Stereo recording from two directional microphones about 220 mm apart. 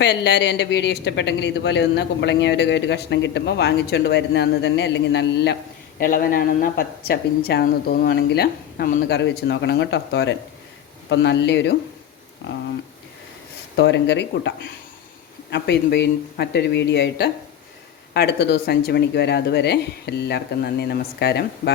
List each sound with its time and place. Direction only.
0.0 s speech: 50° left (ahead or behind)
6.0 s speech: 40° left (ahead or behind)
13.7 s speech: 50° left (ahead or behind)